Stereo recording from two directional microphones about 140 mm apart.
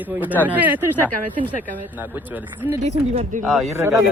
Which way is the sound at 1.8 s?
10° right (ahead or behind).